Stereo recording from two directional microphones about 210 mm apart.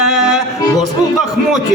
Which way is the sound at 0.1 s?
Centre (ahead or behind).